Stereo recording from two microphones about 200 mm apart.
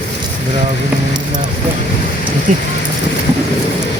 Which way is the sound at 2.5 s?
40° right (ahead or behind).